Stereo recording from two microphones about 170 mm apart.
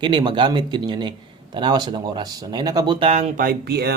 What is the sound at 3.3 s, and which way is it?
Speech, 60° right (ahead or behind).